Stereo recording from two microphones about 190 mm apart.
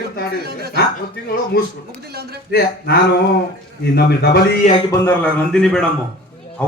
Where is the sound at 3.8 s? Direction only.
60° left (ahead or behind).